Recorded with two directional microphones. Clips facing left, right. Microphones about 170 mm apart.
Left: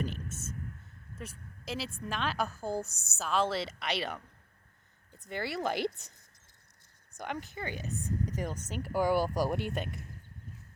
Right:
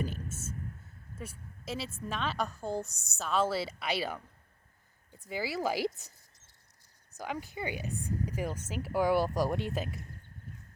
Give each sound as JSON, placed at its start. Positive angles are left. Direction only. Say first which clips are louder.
{"t": 0.0, "sound": "a woman's voice", "louder": "even", "side_deg": -10}
{"t": 7.2, "sound": "a woman's voice", "louder": "right 1 dB", "side_deg": -5}